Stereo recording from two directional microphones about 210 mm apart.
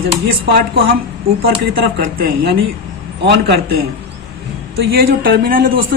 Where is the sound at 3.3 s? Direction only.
50° right (ahead or behind).